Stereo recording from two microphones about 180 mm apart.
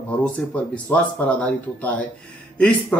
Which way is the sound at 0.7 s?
10° left (ahead or behind).